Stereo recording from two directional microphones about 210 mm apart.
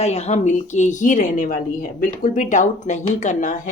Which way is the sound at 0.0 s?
30° left (ahead or behind).